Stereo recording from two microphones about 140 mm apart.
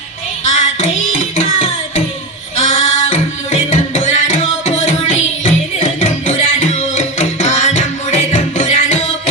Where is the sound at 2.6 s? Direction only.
50° left (ahead or behind).